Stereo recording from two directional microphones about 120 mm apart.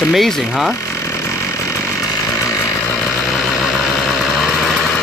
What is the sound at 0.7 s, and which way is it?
Chainsaw, 25° left (ahead or behind).